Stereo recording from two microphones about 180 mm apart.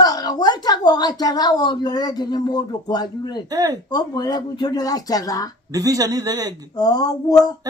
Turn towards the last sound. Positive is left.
turn(degrees=20)  # may be behind; listen again after turning